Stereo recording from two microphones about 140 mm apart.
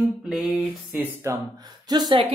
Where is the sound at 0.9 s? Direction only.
15° right (ahead or behind).